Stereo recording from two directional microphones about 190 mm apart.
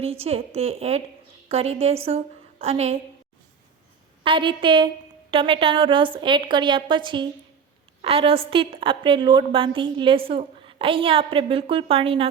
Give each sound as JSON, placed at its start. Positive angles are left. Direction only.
{"t": 0.0, "sound": "a woman's voice", "side_deg": -30}
{"t": 4.2, "sound": "a woman's voice", "side_deg": -25}